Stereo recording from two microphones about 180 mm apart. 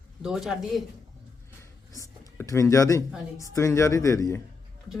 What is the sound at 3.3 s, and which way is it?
Speech, 15° left (ahead or behind).